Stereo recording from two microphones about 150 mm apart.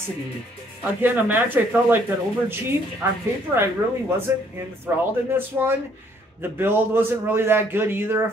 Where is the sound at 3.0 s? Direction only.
15° right (ahead or behind).